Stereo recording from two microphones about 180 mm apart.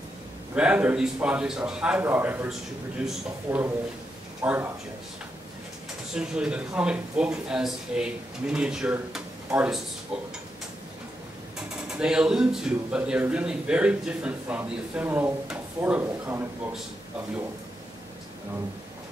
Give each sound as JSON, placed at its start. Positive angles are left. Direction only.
{"t": 0.6, "sound": "a man's voice", "side_deg": -5}
{"t": 6.1, "sound": "speech", "side_deg": -5}
{"t": 11.9, "sound": "a man's voice", "side_deg": -5}